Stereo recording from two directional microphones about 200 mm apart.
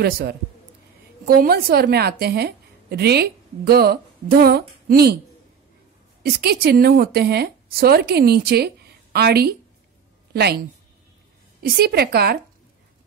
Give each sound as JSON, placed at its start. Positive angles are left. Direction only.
{"t": 0.0, "sound": "a woman's voice", "side_deg": -50}
{"t": 6.2, "sound": "a woman's voice", "side_deg": -50}
{"t": 11.6, "sound": "a woman's voice", "side_deg": -50}